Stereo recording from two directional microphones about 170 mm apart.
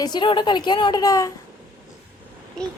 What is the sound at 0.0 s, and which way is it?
A woman's voice, 25° left (ahead or behind).